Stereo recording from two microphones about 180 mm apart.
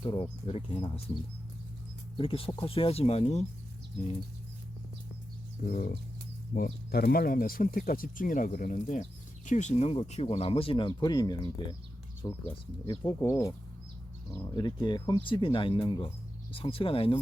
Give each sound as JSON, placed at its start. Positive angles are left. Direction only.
{"t": 0.0, "sound": "speech", "side_deg": 25}
{"t": 2.1, "sound": "speech", "side_deg": 30}
{"t": 5.6, "sound": "speech", "side_deg": 50}
{"t": 6.5, "sound": "speech", "side_deg": 65}